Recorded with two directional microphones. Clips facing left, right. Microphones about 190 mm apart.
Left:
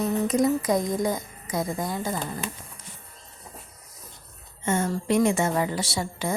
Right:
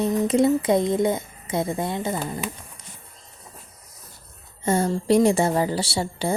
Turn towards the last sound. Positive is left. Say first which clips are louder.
# right 3 dB
turn(degrees=-30)  # may be behind; listen again after turning